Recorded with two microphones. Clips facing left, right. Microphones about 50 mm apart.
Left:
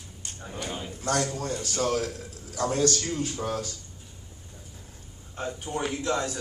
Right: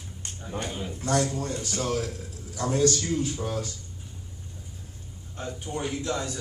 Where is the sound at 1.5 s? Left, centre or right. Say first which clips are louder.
Even; right.